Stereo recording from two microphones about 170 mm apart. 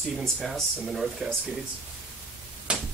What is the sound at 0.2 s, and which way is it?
Speech, centre (ahead or behind).